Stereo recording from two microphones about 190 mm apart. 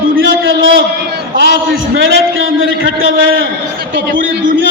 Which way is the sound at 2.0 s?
85° right.